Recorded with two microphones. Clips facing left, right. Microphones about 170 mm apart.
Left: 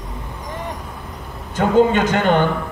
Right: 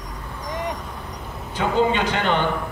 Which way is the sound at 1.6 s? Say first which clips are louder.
Left 6 dB; 50° left (ahead or behind).